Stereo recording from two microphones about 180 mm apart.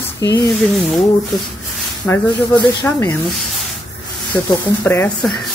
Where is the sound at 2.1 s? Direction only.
15° left (ahead or behind).